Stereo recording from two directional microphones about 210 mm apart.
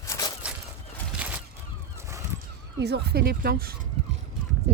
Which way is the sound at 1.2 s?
5° right (ahead or behind).